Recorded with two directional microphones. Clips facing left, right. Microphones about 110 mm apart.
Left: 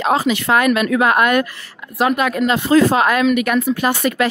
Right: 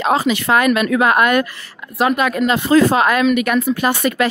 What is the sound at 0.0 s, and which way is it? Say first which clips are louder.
Speech: even; 25° right (ahead or behind).